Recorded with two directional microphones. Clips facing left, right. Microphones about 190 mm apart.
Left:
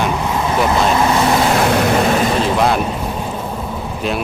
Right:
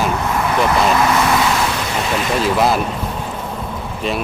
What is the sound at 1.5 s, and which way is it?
Vehicle, 50° left (ahead or behind).